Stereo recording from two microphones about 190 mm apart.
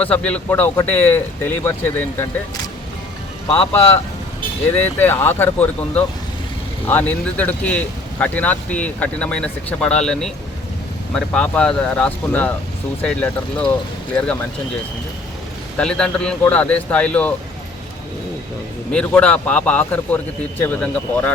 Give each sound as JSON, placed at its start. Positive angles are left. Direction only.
{"t": 0.0, "sound": "speech", "side_deg": 5}
{"t": 4.8, "sound": "speech", "side_deg": 10}
{"t": 15.8, "sound": "speech", "side_deg": 5}
{"t": 18.9, "sound": "speech", "side_deg": 5}